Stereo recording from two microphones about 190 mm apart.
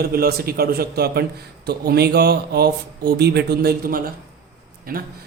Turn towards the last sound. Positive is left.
turn(degrees=-50)  # may be behind; listen again after turning